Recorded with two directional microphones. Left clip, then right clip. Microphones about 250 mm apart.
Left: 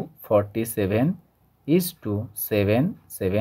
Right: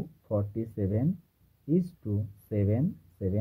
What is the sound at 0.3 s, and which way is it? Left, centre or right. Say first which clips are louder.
Speech: left 11 dB; left.